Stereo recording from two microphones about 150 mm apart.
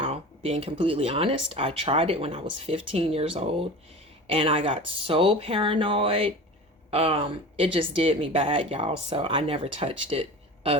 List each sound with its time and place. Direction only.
0.0 s speech: 40° right (ahead or behind)